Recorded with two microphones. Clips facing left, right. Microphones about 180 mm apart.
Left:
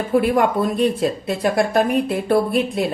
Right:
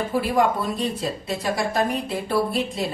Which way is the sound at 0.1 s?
55° left (ahead or behind).